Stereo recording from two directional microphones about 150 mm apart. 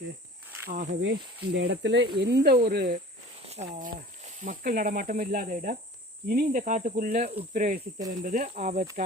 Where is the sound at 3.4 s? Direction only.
45° right (ahead or behind).